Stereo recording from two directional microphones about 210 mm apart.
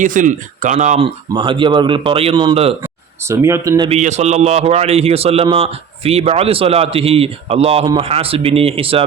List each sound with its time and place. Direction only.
0.0 s a man's voice: 40° right (ahead or behind)
3.2 s speech: 15° right (ahead or behind)
3.8 s a man's voice: 30° right (ahead or behind)